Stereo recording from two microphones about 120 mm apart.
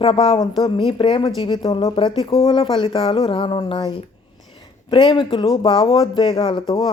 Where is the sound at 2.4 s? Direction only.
40° left (ahead or behind).